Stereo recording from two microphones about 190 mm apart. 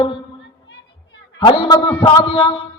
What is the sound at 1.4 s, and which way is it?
A man's voice, 25° left (ahead or behind).